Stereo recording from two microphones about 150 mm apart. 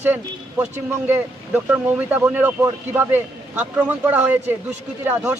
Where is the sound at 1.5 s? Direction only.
10° right (ahead or behind).